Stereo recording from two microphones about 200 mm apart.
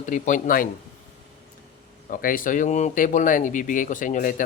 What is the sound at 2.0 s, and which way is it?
Speech, 45° left (ahead or behind).